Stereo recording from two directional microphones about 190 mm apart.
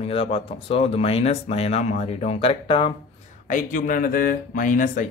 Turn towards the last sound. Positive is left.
turn(degrees=45)  # may be behind; listen again after turning